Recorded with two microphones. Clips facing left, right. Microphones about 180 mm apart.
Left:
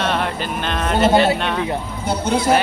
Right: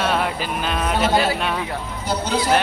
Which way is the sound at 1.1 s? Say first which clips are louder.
Left 6 dB; 25° left (ahead or behind).